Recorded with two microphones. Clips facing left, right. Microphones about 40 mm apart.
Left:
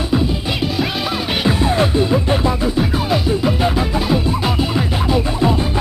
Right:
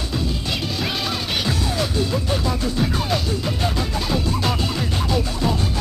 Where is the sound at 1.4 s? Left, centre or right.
Left.